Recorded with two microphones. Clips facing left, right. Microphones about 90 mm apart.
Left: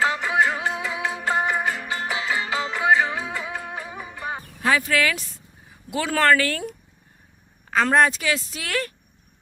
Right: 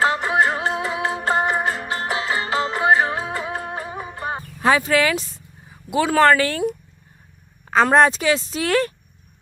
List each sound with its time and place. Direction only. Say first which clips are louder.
0.0 s music: right 3 dB; 40° right (ahead or behind)
4.6 s speech: right 4 dB; 25° right (ahead or behind)
7.9 s speech: right 3 dB; 25° right (ahead or behind)